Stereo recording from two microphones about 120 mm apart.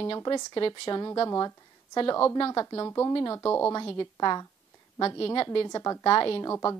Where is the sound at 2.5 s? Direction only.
30° left (ahead or behind).